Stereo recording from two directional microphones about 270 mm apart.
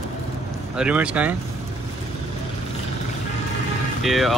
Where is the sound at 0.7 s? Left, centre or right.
Centre.